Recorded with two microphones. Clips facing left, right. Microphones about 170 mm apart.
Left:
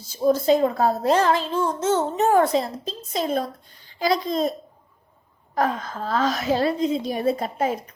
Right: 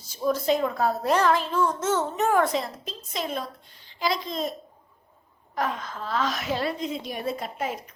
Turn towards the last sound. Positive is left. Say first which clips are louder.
# left 7 dB
turn(degrees=35)  # may be behind; listen again after turning